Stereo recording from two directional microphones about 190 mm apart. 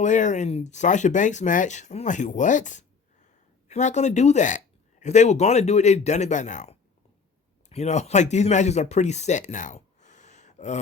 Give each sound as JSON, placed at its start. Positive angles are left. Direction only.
{"t": 0.0, "sound": "speech", "side_deg": 40}